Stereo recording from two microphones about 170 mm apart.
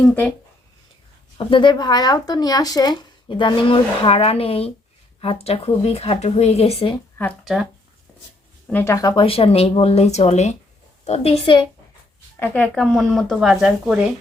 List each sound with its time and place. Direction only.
0.0 s speech: 10° left (ahead or behind)
1.4 s speech: 30° left (ahead or behind)
7.2 s speech: 10° left (ahead or behind)
8.7 s speech: 15° left (ahead or behind); by 11.6 s 30° left (ahead or behind)
12.4 s speech: 10° left (ahead or behind)